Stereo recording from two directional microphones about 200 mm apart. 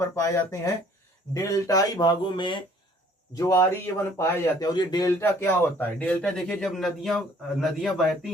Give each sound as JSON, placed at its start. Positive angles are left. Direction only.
{"t": 0.2, "sound": "a man's voice", "side_deg": 15}